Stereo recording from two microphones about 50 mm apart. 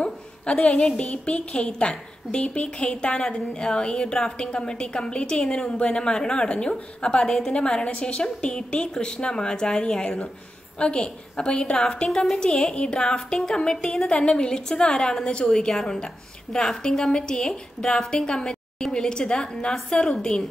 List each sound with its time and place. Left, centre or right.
0.0 s a sound: left
0.9 s a woman's voice: left
7.2 s a woman's voice: centre
7.5 s a woman's voice: centre